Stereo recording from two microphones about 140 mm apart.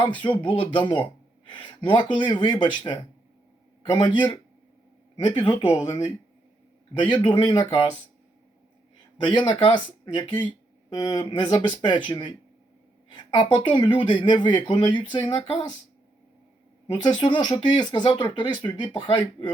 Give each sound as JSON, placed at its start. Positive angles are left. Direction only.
{"t": 0.4, "sound": "speech", "side_deg": 35}
{"t": 5.2, "sound": "speech", "side_deg": 35}
{"t": 7.0, "sound": "speech", "side_deg": 35}
{"t": 9.2, "sound": "speech", "side_deg": 30}
{"t": 13.1, "sound": "a sound", "side_deg": 35}
{"t": 13.7, "sound": "speech", "side_deg": 35}
{"t": 16.8, "sound": "speech", "side_deg": 30}